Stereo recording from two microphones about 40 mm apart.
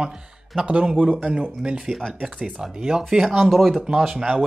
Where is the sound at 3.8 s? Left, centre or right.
Centre.